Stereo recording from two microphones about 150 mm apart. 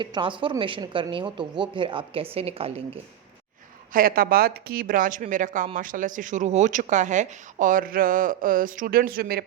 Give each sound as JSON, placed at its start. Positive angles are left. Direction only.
{"t": 0.0, "sound": "a woman's voice", "side_deg": -30}
{"t": 3.9, "sound": "speech", "side_deg": -75}